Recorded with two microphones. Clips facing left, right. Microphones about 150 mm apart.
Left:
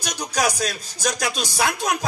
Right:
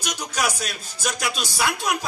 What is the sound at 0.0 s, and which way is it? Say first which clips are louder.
A man's voice: left 3 dB; 40° left (ahead or behind).